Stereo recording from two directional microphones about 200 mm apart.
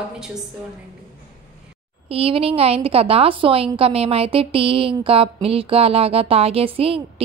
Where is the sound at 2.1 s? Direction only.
30° right (ahead or behind).